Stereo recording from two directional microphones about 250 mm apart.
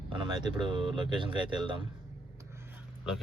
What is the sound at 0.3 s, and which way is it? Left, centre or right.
Speech, centre.